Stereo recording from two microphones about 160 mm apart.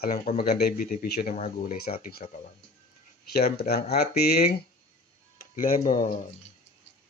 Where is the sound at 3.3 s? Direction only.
75° left (ahead or behind).